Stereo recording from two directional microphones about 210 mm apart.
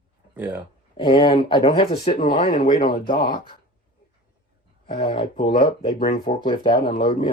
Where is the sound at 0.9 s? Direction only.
20° left (ahead or behind).